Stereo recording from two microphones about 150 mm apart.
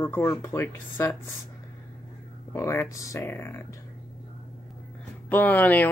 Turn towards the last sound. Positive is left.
turn(degrees=10)  # may be behind; listen again after turning